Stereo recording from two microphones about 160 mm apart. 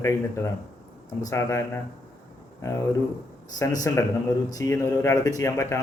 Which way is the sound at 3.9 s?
20° left (ahead or behind).